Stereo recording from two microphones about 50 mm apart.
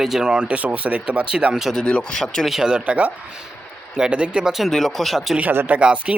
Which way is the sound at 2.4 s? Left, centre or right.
Centre.